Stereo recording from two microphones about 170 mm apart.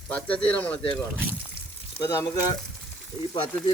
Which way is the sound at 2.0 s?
15° left (ahead or behind).